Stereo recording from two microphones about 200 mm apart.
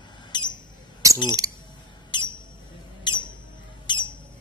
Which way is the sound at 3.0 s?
25° left (ahead or behind).